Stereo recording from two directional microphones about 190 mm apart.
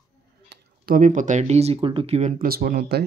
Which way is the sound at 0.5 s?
50° right (ahead or behind).